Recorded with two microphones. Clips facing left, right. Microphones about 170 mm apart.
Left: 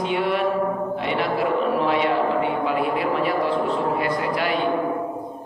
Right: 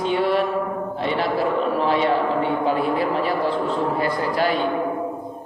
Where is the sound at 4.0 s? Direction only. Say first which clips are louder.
Right 2 dB; 35° right (ahead or behind).